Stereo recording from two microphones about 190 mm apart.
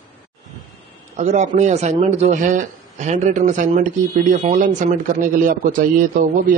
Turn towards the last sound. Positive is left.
turn(degrees=-45)  # may be behind; listen again after turning